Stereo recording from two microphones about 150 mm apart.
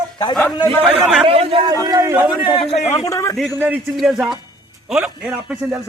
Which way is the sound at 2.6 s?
40° left (ahead or behind).